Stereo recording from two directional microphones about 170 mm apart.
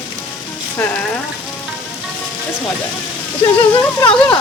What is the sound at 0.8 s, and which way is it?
Speech, 5° left (ahead or behind).